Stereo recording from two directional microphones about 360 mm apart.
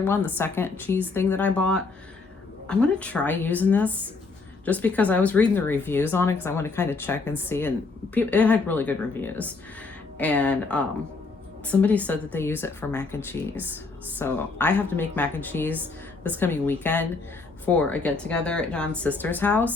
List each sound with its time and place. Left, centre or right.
0.0 s speech: centre